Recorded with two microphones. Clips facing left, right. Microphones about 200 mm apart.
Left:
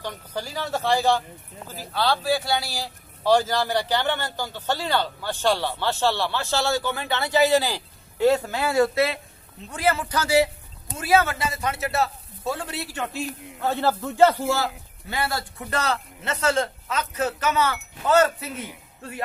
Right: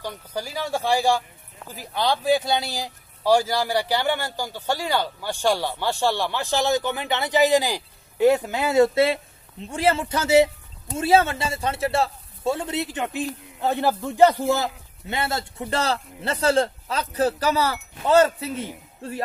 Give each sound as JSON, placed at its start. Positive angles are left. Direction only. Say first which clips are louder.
{"t": 0.0, "sound": "a man's voice", "louder": "right 1 dB", "side_deg": -10}